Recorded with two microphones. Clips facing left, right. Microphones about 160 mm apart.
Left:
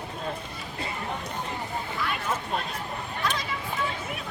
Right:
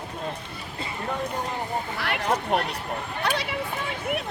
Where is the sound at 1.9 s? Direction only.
70° right (ahead or behind).